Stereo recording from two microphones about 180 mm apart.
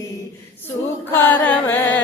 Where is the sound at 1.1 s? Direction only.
10° left (ahead or behind).